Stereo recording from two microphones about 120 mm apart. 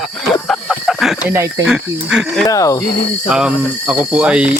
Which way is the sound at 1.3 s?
25° right (ahead or behind).